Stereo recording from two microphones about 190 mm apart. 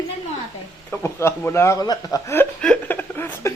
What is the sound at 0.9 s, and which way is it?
Speech, 15° left (ahead or behind).